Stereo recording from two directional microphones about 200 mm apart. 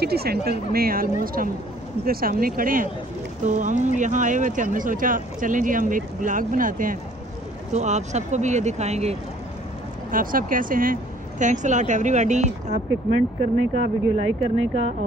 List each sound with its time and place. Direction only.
0.0 s speech: 50° right (ahead or behind); by 9.1 s 35° right (ahead or behind)
10.1 s speech: 45° right (ahead or behind)
13.0 s speech: centre (ahead or behind)
14.1 s speech: 30° right (ahead or behind)